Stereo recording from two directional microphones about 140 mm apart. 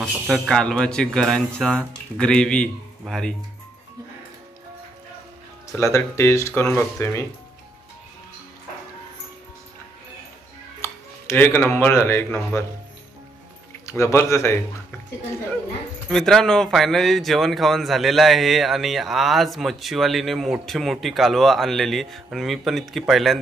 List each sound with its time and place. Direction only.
0.3 s speech: 5° left (ahead or behind)
5.8 s speech: 20° left (ahead or behind)
10.8 s speech: 15° left (ahead or behind)
13.8 s speech: 20° left (ahead or behind)
16.1 s speech: 5° left (ahead or behind)